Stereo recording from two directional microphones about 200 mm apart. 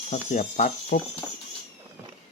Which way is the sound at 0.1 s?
35° left (ahead or behind).